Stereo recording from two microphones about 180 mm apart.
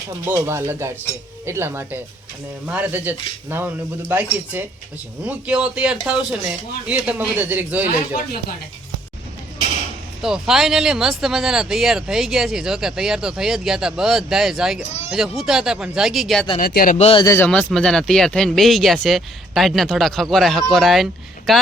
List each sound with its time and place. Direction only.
0.3 s speech: 15° right (ahead or behind)
10.2 s speech: 5° right (ahead or behind)
16.6 s speech: 55° left (ahead or behind)
17.2 s speech: 10° left (ahead or behind)